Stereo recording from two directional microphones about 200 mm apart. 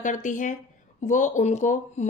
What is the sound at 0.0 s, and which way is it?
Speech, 40° left (ahead or behind).